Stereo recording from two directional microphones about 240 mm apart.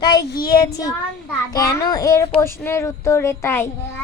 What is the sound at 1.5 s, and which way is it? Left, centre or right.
A child's voice, centre.